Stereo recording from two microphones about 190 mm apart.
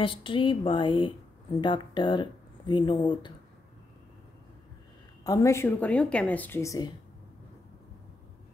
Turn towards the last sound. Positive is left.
turn(degrees=15)  # may be behind; listen again after turning